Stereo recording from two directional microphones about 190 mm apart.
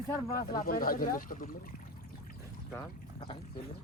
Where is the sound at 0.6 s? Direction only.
50° left (ahead or behind).